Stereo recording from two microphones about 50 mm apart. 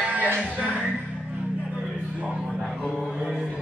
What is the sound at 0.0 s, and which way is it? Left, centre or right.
Music, right.